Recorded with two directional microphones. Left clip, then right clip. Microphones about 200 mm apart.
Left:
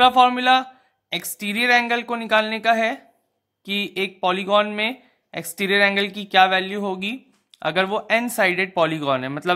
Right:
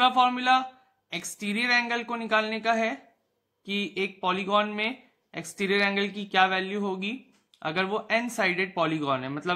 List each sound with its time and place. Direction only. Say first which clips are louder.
0.0 s speech: left 7 dB; 35° left (ahead or behind)